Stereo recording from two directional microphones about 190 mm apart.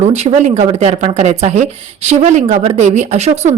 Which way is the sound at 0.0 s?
35° right (ahead or behind).